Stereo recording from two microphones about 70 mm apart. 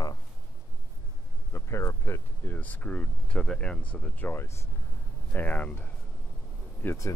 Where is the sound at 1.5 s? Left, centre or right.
Left.